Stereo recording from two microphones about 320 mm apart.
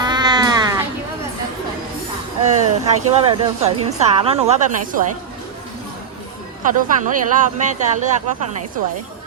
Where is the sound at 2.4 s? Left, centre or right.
Right.